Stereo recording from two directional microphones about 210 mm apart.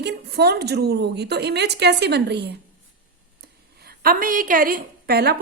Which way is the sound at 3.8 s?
45° right (ahead or behind).